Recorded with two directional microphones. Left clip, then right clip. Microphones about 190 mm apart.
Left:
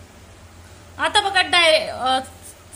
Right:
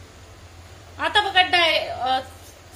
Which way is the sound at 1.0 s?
35° left (ahead or behind).